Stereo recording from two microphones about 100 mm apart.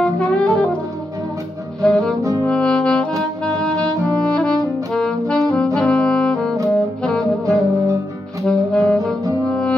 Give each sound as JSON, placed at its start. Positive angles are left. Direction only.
{"t": 0.0, "sound": "music", "side_deg": 10}
{"t": 1.8, "sound": "music", "side_deg": 5}
{"t": 2.4, "sound": "brass instrument", "side_deg": 10}
{"t": 5.8, "sound": "saxophone", "side_deg": 10}
{"t": 7.4, "sound": "music", "side_deg": -35}
{"t": 8.5, "sound": "saxophone", "side_deg": 5}
{"t": 9.5, "sound": "music", "side_deg": 10}